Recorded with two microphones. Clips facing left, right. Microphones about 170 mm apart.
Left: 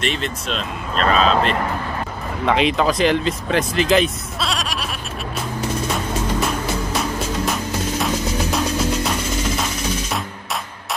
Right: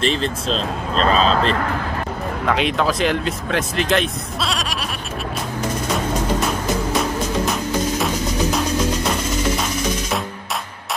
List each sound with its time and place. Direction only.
0.0 s speech: 30° right (ahead or behind)
2.4 s speech: centre (ahead or behind)